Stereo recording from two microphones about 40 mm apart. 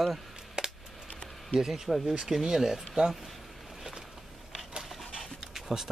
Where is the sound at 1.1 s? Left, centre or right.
Left.